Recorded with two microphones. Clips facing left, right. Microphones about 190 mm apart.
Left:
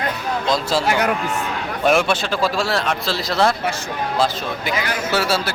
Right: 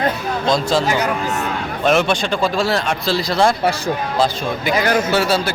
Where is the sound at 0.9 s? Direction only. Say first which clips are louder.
Even; 60° left (ahead or behind).